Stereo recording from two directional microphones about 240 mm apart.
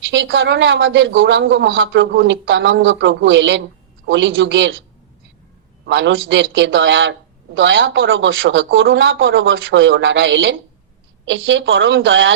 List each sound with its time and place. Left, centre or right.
0.0 s a man's voice: right
5.8 s a man's voice: right